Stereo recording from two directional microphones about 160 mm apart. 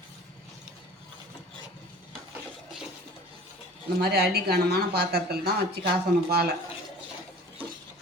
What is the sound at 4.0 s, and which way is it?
Speech, 80° right.